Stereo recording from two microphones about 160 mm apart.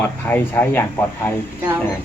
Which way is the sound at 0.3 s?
10° left (ahead or behind).